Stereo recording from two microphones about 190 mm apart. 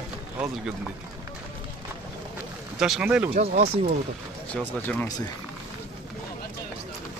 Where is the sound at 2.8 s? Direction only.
5° right (ahead or behind).